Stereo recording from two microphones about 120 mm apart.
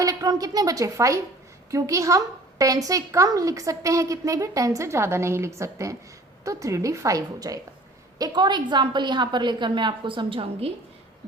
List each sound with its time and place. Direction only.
0.0 s a woman's voice: 30° right (ahead or behind); by 10.7 s 50° right (ahead or behind)